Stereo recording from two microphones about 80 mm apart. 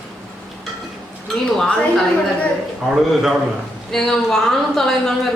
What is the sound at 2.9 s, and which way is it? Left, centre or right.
Speech, centre.